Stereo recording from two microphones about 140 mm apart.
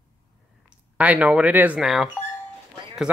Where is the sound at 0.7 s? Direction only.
10° right (ahead or behind).